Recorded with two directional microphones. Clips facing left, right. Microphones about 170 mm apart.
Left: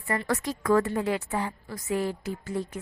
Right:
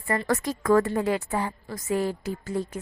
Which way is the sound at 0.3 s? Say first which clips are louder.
Right 2 dB; 45° right (ahead or behind).